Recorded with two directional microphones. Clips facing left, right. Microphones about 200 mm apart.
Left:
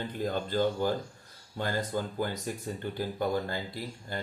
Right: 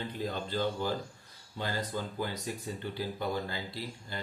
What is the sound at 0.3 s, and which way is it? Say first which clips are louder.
Speech: left 5 dB; 50° left (ahead or behind).